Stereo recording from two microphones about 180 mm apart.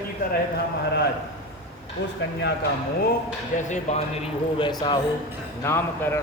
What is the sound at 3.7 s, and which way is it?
Speech, 40° left (ahead or behind).